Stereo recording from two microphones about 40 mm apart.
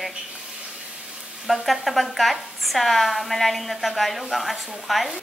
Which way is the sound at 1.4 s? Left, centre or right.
Centre.